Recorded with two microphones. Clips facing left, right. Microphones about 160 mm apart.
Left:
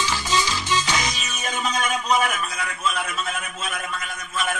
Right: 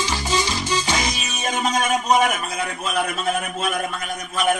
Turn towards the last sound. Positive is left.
turn(degrees=-45)  # may be behind; listen again after turning